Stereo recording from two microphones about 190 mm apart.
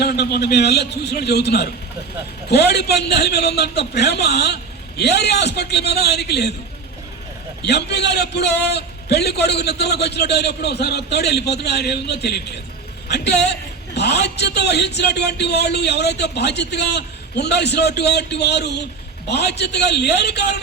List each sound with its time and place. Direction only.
0.0 s a man's voice: 55° left (ahead or behind)
7.6 s a man's voice: 60° left (ahead or behind)